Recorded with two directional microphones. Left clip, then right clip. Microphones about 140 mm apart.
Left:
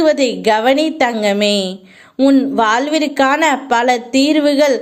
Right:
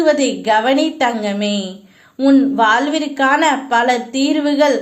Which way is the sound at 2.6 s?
40° left (ahead or behind).